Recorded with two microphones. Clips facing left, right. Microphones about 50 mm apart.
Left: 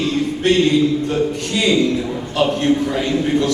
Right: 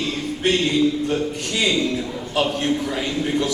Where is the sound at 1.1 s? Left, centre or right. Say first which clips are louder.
Left 4 dB; centre.